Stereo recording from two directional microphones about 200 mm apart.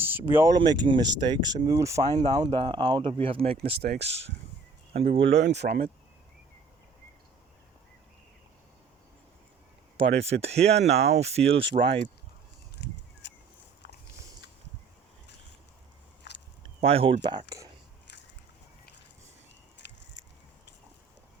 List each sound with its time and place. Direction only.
0.0 s speech: 10° right (ahead or behind); by 3.6 s 30° right (ahead or behind)
3.8 s speech: 55° right (ahead or behind)
4.9 s speech: 30° right (ahead or behind)
5.3 s speech: 60° right (ahead or behind)
10.4 s speech: 30° right (ahead or behind)
12.8 s a sound: 60° left (ahead or behind)
16.3 s biting: 60° left (ahead or behind)
16.8 s speech: 30° right (ahead or behind)
19.8 s a sound: 60° left (ahead or behind)